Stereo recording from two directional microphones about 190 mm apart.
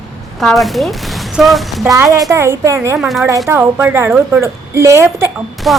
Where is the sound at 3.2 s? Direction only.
15° right (ahead or behind).